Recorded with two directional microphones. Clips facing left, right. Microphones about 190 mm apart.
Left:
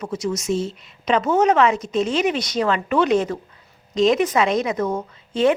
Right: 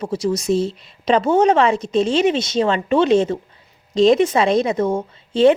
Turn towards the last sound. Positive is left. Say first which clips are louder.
# right 5 dB
turn(degrees=-30)  # may be behind; listen again after turning